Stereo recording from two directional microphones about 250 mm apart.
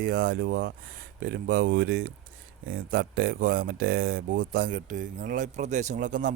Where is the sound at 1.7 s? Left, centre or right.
Right.